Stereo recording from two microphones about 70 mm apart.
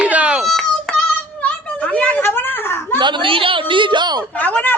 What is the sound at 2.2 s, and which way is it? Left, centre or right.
Speech, left.